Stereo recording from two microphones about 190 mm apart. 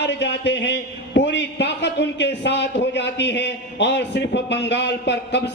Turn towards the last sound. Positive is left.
turn(degrees=65)  # may be behind; listen again after turning